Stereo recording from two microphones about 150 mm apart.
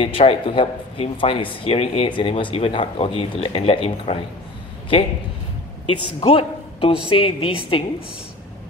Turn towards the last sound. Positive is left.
turn(degrees=35)  # may be behind; listen again after turning